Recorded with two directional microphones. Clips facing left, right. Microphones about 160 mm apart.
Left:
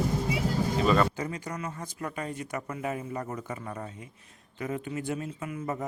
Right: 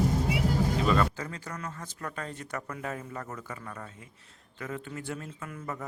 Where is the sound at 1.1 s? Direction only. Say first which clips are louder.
Left 4 dB; 15° left (ahead or behind).